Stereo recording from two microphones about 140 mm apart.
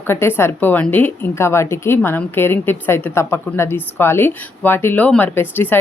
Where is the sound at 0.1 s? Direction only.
15° left (ahead or behind).